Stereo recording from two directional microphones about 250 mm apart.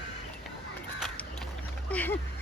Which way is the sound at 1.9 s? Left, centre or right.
Centre.